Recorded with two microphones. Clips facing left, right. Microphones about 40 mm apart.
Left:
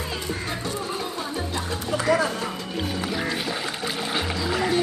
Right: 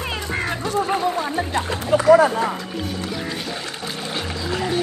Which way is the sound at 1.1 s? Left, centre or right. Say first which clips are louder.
Right 6 dB; right.